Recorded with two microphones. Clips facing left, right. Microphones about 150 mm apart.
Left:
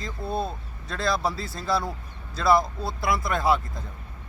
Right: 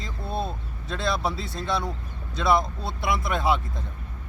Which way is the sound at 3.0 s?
25° right (ahead or behind).